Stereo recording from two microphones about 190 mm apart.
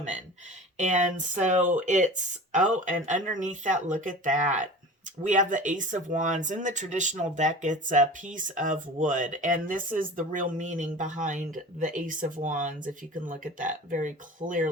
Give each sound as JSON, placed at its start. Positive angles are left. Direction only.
{"t": 0.8, "sound": "speech", "side_deg": -40}